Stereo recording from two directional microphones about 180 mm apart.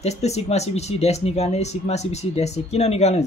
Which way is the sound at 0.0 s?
35° left (ahead or behind).